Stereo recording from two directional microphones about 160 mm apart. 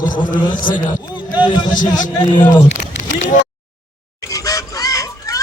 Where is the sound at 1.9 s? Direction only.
25° left (ahead or behind).